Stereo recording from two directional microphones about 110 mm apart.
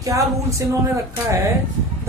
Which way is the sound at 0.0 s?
30° right (ahead or behind).